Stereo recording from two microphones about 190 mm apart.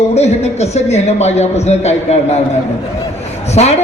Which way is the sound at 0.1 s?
35° left (ahead or behind).